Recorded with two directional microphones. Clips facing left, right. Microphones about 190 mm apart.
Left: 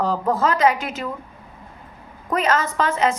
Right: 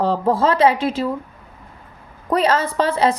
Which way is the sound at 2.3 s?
30° right (ahead or behind).